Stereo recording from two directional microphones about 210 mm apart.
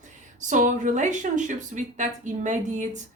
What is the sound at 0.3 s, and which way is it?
A woman's voice, 35° right (ahead or behind).